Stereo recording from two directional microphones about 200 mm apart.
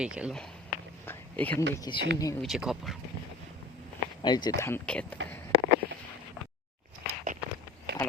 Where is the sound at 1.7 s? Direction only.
20° left (ahead or behind).